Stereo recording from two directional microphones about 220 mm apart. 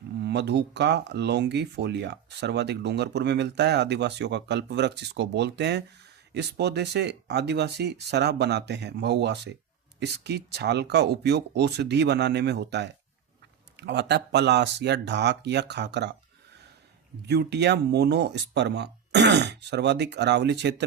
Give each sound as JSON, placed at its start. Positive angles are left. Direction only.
{"t": 0.2, "sound": "speech", "side_deg": -50}
{"t": 17.2, "sound": "speech", "side_deg": -50}